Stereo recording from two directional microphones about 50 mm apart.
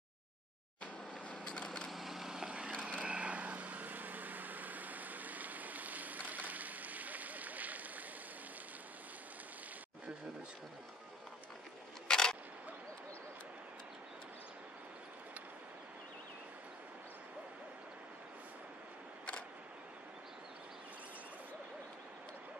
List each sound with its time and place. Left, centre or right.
1.3 s a sound: left
1.9 s vehicle: centre; by 7.8 s right
12.1 s single-lens reflex camera: centre